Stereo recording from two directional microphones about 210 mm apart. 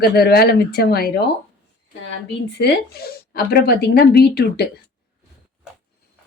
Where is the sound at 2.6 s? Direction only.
50° left (ahead or behind).